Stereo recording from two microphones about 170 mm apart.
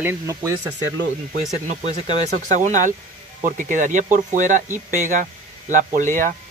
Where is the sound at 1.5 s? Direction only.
45° right (ahead or behind).